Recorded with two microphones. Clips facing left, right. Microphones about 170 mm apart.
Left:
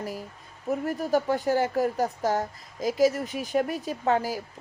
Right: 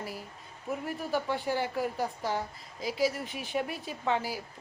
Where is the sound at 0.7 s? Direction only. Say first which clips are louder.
Left 7 dB; 40° left (ahead or behind).